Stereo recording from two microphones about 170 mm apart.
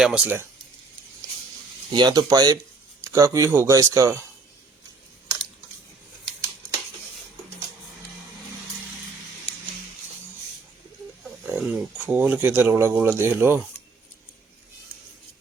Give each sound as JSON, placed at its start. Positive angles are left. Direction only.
{"t": 0.0, "sound": "speech", "side_deg": -5}
{"t": 1.9, "sound": "speech", "side_deg": -25}
{"t": 11.4, "sound": "speech", "side_deg": -5}